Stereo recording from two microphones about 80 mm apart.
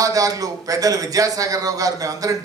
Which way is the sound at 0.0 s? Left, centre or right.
Right.